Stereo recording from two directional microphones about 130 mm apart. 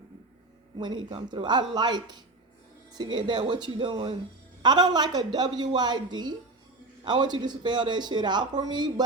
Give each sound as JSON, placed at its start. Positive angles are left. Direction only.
{"t": 0.8, "sound": "speech", "side_deg": -35}